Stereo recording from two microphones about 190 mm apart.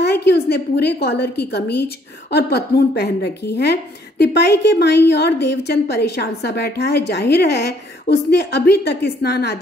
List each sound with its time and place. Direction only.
0.0 s a woman's voice: 60° left (ahead or behind)